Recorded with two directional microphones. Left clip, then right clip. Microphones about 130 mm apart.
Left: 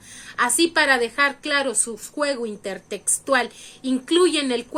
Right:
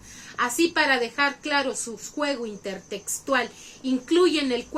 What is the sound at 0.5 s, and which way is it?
A woman's voice, 20° left (ahead or behind).